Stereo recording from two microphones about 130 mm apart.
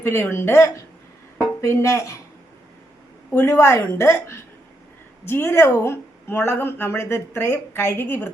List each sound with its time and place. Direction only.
0.0 s a woman's voice: 20° left (ahead or behind)
3.3 s a woman's voice: 20° left (ahead or behind)